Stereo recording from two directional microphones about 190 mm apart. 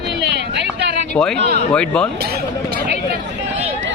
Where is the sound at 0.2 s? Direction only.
65° right (ahead or behind).